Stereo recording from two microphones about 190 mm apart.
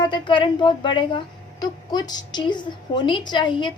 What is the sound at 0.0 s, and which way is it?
A woman's voice, 25° left (ahead or behind).